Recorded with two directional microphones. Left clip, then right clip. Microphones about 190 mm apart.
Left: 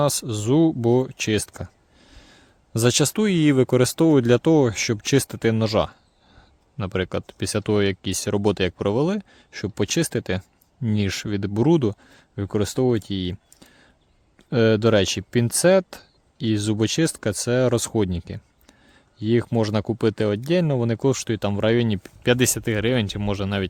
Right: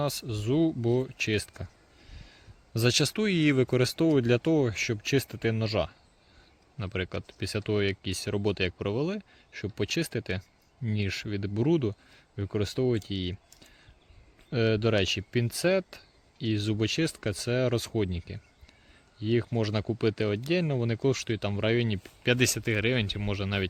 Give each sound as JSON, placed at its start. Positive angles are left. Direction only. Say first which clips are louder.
{"t": 0.0, "sound": "speech", "louder": "left 9 dB", "side_deg": 50}